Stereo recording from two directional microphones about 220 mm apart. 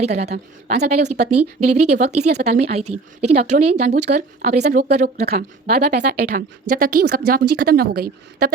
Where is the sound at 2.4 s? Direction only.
30° right (ahead or behind).